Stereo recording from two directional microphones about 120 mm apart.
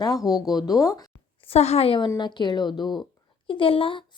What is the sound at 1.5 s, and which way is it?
Speech, 60° left (ahead or behind).